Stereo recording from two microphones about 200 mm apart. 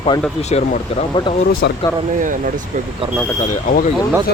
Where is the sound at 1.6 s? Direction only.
55° left (ahead or behind).